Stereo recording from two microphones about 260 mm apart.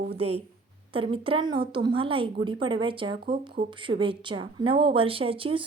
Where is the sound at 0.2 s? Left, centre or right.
Right.